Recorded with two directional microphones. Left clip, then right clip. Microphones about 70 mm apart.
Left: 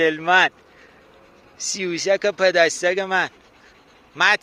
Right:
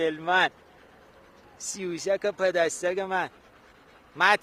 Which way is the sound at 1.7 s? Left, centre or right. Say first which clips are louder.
Left 7 dB; left.